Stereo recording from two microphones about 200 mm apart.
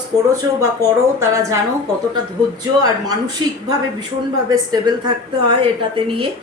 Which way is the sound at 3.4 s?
20° right (ahead or behind).